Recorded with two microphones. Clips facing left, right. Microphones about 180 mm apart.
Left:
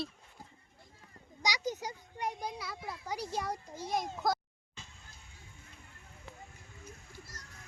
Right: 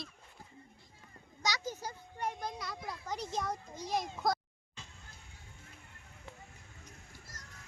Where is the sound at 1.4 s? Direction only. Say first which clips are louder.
Left 2 dB; 15° left (ahead or behind).